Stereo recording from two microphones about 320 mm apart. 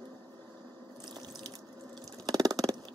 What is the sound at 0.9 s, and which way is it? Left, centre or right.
Water, centre.